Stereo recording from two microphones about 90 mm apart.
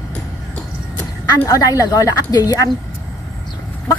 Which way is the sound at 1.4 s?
40° left (ahead or behind).